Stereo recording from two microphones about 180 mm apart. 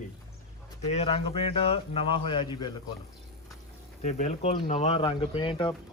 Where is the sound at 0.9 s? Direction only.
35° left (ahead or behind).